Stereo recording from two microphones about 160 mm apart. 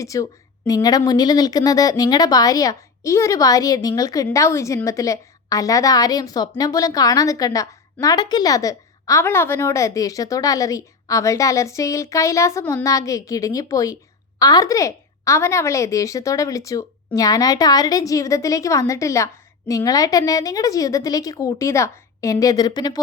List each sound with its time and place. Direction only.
0.0 s a woman's voice: 20° left (ahead or behind)